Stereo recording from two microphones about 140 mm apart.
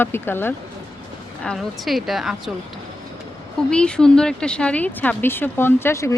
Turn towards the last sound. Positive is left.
turn(degrees=20)  # may be behind; listen again after turning